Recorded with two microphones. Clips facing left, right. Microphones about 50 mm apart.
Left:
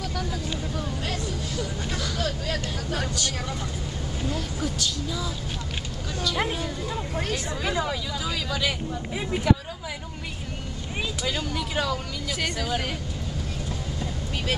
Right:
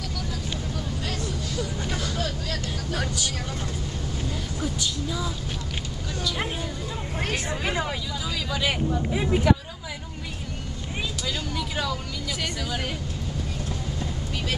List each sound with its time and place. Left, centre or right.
0.7 s vehicle: centre
4.7 s speech: centre
7.2 s speech: right
11.2 s speech: centre